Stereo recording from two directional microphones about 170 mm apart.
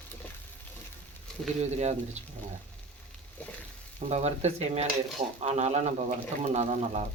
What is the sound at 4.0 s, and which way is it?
Speech, 40° right (ahead or behind).